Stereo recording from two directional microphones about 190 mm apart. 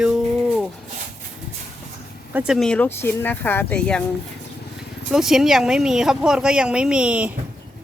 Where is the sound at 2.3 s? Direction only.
5° right (ahead or behind).